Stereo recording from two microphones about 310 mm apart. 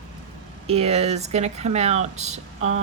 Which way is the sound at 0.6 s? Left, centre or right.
Centre.